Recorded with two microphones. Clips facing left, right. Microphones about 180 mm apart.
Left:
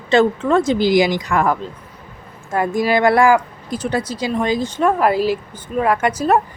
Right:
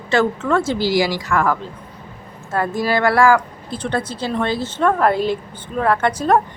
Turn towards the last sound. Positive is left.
turn(degrees=10)  # may be behind; listen again after turning